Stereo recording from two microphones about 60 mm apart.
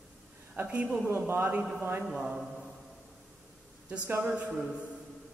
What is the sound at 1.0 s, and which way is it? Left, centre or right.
A man's voice, right.